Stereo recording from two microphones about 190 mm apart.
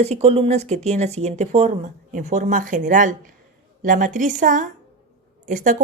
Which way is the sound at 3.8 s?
45° right (ahead or behind).